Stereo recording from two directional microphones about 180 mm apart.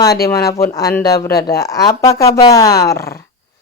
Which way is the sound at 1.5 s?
20° left (ahead or behind).